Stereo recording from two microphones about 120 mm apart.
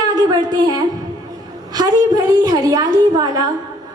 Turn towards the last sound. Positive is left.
turn(degrees=-35)  # may be behind; listen again after turning